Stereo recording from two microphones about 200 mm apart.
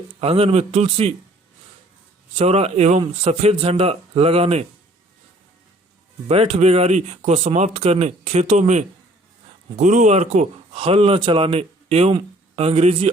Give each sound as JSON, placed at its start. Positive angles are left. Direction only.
{"t": 0.2, "sound": "speech", "side_deg": -30}
{"t": 2.3, "sound": "speech", "side_deg": -30}
{"t": 6.2, "sound": "speech", "side_deg": -30}